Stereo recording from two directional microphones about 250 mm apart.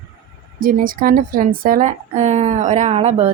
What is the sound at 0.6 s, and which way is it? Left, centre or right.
A woman's voice, right.